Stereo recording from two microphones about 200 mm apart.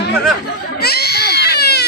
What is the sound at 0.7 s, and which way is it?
Baby cry, 50° left (ahead or behind).